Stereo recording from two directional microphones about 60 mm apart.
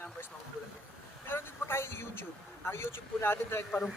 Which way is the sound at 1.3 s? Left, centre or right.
Left.